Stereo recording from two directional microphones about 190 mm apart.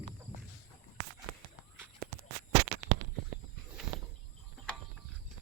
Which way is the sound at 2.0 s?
50° right (ahead or behind).